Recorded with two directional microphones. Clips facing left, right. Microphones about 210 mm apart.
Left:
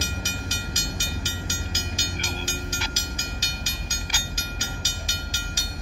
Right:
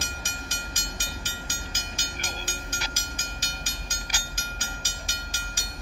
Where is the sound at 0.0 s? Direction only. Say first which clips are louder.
Left 6 dB; 55° right (ahead or behind).